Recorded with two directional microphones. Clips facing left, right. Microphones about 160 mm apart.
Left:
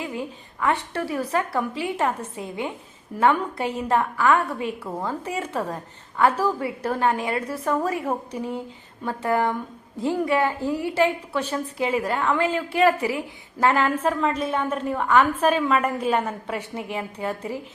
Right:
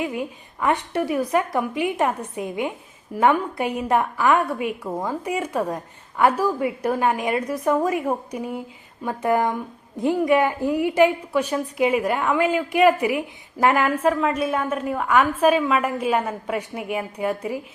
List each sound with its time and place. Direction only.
0.0 s a woman's voice: 15° right (ahead or behind)